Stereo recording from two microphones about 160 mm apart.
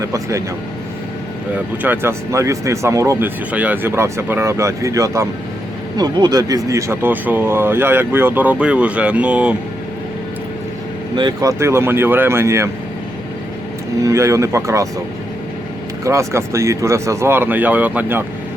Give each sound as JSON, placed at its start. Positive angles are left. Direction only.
{"t": 0.0, "sound": "speech", "side_deg": -20}
{"t": 1.5, "sound": "speech", "side_deg": -10}
{"t": 11.1, "sound": "speech", "side_deg": -30}
{"t": 14.0, "sound": "speech", "side_deg": -20}
{"t": 16.0, "sound": "speech", "side_deg": -20}